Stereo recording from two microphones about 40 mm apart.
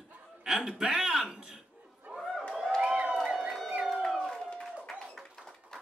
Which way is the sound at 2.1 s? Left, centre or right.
Right.